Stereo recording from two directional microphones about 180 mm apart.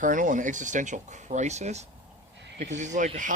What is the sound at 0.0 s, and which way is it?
Speech, 45° right (ahead or behind).